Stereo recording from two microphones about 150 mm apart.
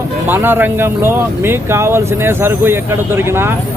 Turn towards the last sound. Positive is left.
turn(degrees=-15)  # may be behind; listen again after turning